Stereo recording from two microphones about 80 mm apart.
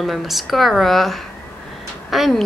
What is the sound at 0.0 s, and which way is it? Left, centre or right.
Speech, centre.